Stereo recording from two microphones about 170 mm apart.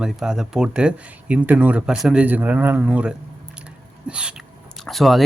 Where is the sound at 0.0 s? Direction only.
5° right (ahead or behind).